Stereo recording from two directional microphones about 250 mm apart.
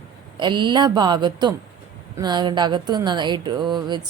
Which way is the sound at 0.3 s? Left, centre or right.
Centre.